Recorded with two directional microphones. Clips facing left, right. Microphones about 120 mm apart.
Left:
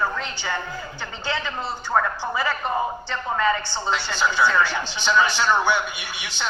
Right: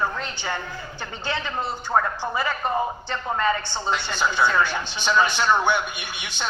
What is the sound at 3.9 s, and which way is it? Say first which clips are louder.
A man's voice: left 1 dB; 20° right (ahead or behind).